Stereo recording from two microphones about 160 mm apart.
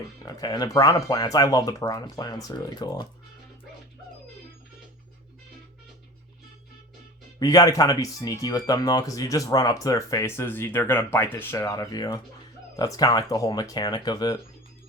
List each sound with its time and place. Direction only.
0.2 s speech: 25° left (ahead or behind)
7.3 s speech: 25° left (ahead or behind)